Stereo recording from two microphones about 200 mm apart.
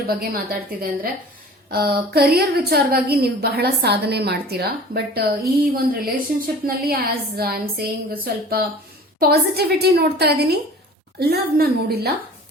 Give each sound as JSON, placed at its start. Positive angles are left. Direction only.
{"t": 0.2, "sound": "a woman's voice", "side_deg": -50}